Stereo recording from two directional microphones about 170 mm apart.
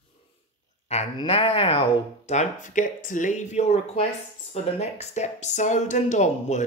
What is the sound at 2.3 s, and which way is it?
Speech, 45° left (ahead or behind).